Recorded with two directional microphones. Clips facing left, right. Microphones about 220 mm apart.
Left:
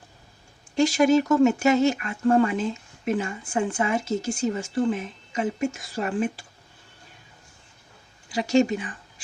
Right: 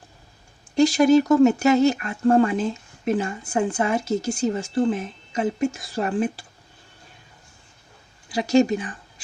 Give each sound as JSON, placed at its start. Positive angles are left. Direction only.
{"t": 0.8, "sound": "speech", "side_deg": -35}
{"t": 8.3, "sound": "speech", "side_deg": -40}